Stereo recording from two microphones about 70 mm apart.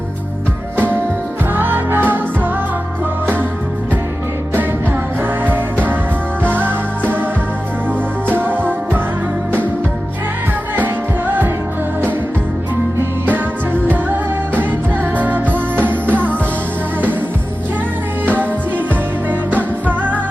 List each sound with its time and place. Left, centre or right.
1.5 s music: right
5.2 s music: right
8.3 s music: right
10.8 s music: right
13.8 s music: right
19.3 s music: right